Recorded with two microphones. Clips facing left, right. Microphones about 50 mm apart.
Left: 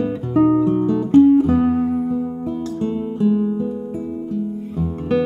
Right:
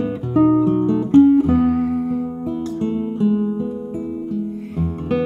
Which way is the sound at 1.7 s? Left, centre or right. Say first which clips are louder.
Even; right.